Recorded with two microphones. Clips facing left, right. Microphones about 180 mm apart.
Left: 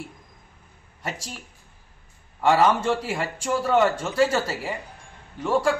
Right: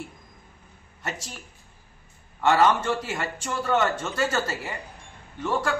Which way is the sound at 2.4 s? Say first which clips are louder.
Left 1 dB; 10° left (ahead or behind).